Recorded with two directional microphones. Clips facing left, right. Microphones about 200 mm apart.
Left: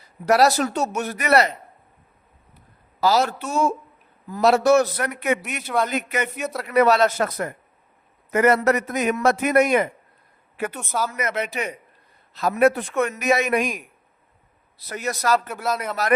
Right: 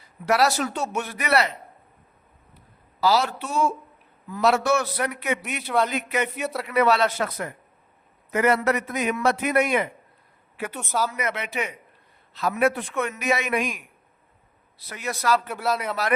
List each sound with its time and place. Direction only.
0.3 s speech: 40° left (ahead or behind)
3.0 s a man's voice: 45° left (ahead or behind)
5.6 s speech: centre (ahead or behind)
5.9 s a man's voice: 45° left (ahead or behind)
6.2 s speech: centre (ahead or behind)
6.7 s a man's voice: 40° left (ahead or behind)
10.8 s speech: centre (ahead or behind)
11.2 s a man's voice: 45° left (ahead or behind)
15.4 s speech: centre (ahead or behind)